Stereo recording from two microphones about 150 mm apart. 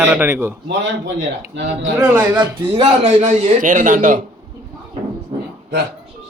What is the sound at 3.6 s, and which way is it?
Speech, 60° right (ahead or behind).